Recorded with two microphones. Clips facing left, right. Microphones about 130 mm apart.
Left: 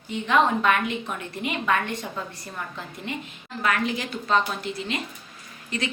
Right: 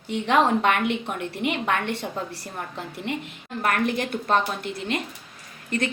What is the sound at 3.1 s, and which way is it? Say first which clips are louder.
Speech: right 3 dB; 70° right (ahead or behind).